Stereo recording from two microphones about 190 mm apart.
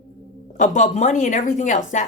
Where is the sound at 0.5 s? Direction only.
40° left (ahead or behind).